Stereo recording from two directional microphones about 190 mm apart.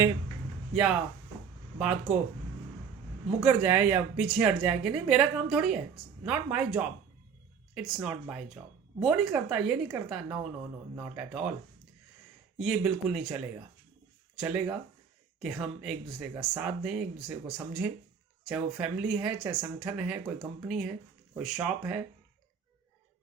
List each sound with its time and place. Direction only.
0.7 s speech: 5° right (ahead or behind)
3.4 s speech: 10° right (ahead or behind)
12.5 s speech: centre (ahead or behind)